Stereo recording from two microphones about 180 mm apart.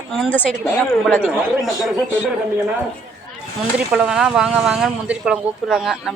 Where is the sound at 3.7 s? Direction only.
5° right (ahead or behind).